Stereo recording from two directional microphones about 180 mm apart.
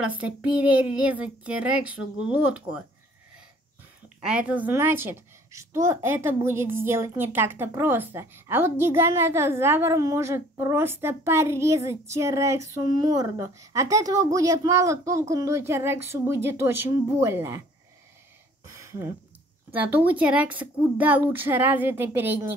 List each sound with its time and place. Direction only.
0.0 s a woman's voice: 5° right (ahead or behind)
4.2 s a woman's voice: 5° right (ahead or behind)
18.7 s a sound: 15° right (ahead or behind)
19.7 s a woman's voice: 10° right (ahead or behind)